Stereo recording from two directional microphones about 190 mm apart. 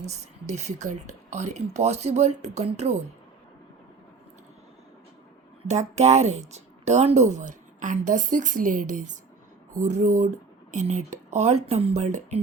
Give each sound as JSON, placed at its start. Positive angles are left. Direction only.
{"t": 0.0, "sound": "speech", "side_deg": -35}
{"t": 5.6, "sound": "speech", "side_deg": -35}